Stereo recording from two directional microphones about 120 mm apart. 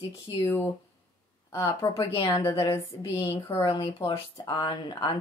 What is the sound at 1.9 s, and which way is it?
Speech, 50° left (ahead or behind).